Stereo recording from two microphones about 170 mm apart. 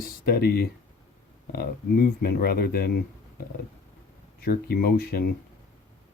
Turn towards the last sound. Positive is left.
turn(degrees=65)  # may be behind; listen again after turning